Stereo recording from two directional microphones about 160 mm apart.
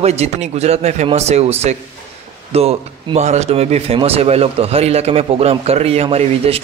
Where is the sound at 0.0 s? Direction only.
40° right (ahead or behind).